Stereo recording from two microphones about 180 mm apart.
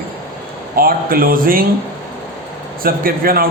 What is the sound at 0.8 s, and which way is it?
Speech, 55° right (ahead or behind).